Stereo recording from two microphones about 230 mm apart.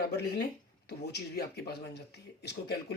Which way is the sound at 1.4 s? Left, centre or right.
Left.